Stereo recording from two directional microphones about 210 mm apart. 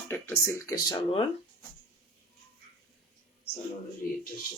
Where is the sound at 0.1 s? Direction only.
15° left (ahead or behind).